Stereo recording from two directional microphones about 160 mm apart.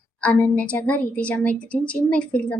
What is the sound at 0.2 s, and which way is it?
A woman's voice, 10° left (ahead or behind).